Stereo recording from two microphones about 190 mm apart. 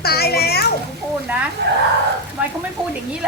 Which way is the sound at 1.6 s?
65° right (ahead or behind).